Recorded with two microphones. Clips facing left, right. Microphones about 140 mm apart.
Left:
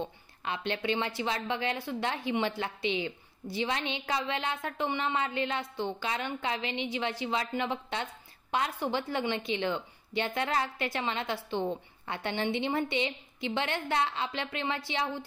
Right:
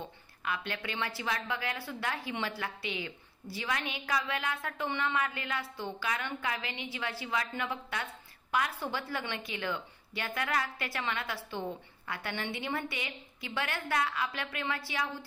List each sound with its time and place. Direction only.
0.4 s a woman's voice: 25° left (ahead or behind)